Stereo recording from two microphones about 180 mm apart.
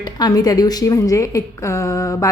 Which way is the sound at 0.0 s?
20° left (ahead or behind).